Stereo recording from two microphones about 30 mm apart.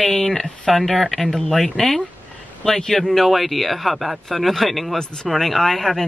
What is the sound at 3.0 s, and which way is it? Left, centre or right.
Speech, centre.